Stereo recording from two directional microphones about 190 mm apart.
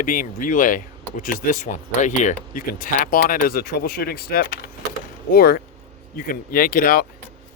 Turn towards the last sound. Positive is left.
turn(degrees=50)  # may be behind; listen again after turning